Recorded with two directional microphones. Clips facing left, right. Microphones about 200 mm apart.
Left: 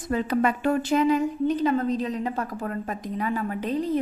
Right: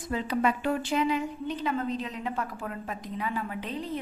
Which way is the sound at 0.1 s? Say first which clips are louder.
Left 4 dB; 50° left (ahead or behind).